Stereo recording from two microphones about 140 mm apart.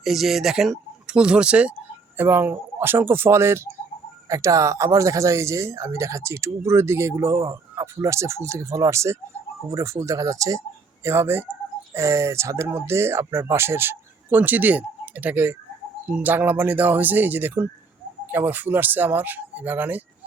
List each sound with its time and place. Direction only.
0.0 s speech: centre (ahead or behind)